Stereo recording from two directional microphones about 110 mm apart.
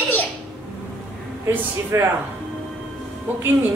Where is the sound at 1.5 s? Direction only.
20° right (ahead or behind).